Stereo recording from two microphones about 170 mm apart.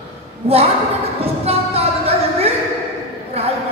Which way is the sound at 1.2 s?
35° right (ahead or behind).